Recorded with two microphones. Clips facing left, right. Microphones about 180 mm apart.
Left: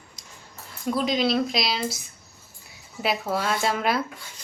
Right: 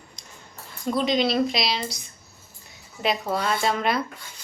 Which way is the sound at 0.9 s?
Centre (ahead or behind).